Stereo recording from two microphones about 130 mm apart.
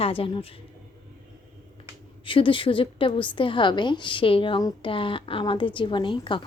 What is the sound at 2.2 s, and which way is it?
A woman's voice, 40° left (ahead or behind).